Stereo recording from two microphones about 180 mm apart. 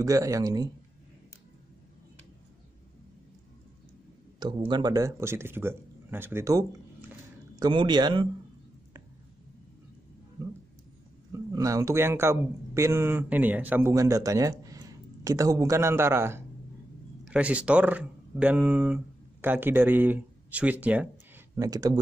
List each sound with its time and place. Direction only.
0.0 s speech: 20° right (ahead or behind)
4.4 s a man's voice: 25° right (ahead or behind)
11.3 s a man's voice: 20° right (ahead or behind)
21.5 s speech: 20° right (ahead or behind)